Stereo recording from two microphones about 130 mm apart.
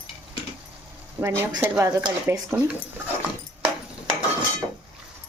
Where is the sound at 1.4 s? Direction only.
20° right (ahead or behind).